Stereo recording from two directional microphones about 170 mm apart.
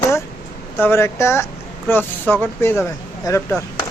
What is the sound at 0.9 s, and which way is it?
Speech, 15° left (ahead or behind).